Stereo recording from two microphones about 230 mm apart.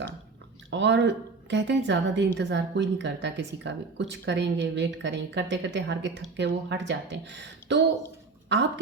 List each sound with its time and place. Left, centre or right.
0.7 s a woman's voice: right